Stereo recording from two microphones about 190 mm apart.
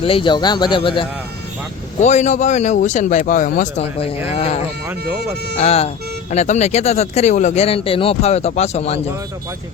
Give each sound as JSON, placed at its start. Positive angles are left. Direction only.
{"t": 0.0, "sound": "speech", "side_deg": 25}
{"t": 2.0, "sound": "speech", "side_deg": 35}